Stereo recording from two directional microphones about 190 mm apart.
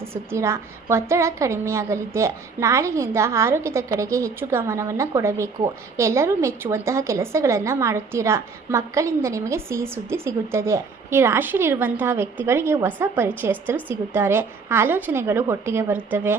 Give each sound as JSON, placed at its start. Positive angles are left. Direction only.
{"t": 0.0, "sound": "a woman's voice", "side_deg": -10}